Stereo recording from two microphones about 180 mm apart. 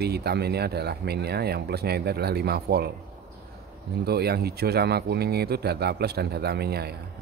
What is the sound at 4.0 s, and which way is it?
Speech, 60° right (ahead or behind).